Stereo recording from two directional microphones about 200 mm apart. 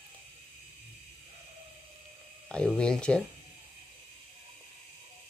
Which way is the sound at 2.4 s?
5° left (ahead or behind).